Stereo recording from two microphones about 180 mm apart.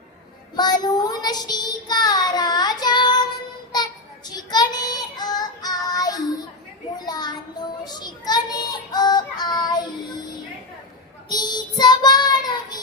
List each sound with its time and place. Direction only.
0.5 s child singing: 20° left (ahead or behind)
4.3 s child singing: 20° left (ahead or behind)
7.0 s a sound: 20° left (ahead or behind)
11.3 s child singing: 25° left (ahead or behind)